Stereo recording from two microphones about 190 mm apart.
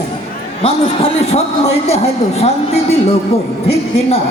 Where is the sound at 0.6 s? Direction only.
30° left (ahead or behind).